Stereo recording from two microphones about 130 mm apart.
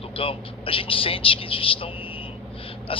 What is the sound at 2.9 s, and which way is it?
Speech, 45° left (ahead or behind).